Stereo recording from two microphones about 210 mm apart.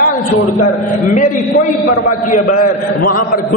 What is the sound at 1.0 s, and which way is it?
A man's voice, 40° left (ahead or behind).